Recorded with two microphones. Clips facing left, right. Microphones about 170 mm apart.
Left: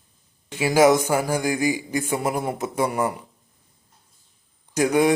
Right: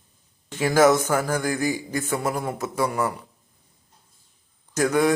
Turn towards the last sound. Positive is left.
turn(degrees=15)  # may be behind; listen again after turning